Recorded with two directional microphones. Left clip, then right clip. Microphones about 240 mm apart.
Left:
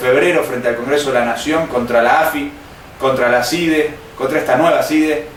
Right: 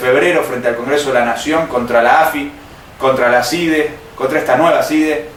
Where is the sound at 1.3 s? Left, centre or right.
Centre.